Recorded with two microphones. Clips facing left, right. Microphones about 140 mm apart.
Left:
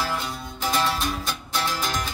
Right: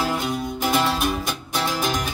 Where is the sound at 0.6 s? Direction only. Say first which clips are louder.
Right 3 dB; 20° right (ahead or behind).